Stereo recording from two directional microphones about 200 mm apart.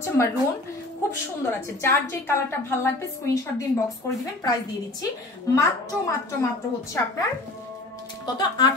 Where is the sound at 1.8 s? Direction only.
15° left (ahead or behind).